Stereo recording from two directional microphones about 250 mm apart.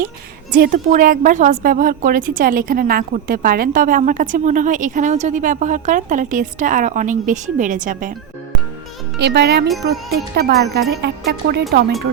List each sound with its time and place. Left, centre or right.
0.5 s a woman's voice: right
9.1 s a woman's voice: right